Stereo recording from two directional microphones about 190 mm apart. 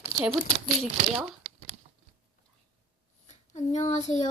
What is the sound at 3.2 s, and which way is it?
Speech, 35° left (ahead or behind).